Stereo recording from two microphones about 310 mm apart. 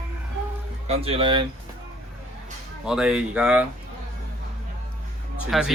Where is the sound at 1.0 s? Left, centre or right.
Centre.